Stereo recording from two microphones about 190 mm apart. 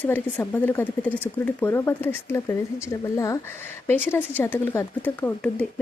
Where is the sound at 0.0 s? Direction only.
10° left (ahead or behind).